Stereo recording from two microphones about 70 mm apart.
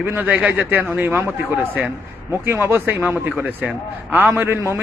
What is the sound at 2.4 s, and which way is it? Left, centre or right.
A man's voice, right.